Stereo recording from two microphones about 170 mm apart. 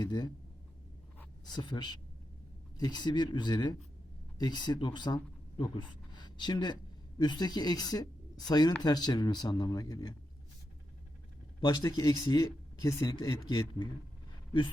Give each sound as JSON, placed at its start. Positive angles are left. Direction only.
{"t": 0.0, "sound": "speech", "side_deg": 25}
{"t": 1.5, "sound": "speech", "side_deg": 25}
{"t": 11.6, "sound": "speech", "side_deg": 25}